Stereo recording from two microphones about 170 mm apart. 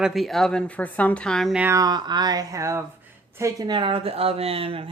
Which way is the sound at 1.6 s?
20° right (ahead or behind).